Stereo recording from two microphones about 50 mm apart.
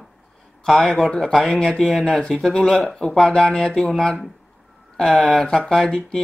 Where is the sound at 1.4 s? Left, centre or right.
Centre.